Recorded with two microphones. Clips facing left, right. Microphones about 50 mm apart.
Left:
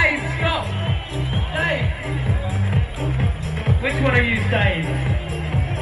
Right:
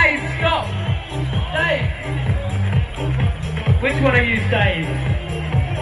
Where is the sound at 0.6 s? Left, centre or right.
Right.